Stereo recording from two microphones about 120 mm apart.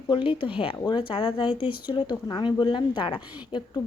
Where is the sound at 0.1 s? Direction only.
45° left (ahead or behind).